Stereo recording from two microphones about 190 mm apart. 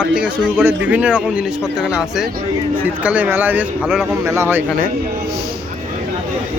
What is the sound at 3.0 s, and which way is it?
A man's voice, 10° right (ahead or behind).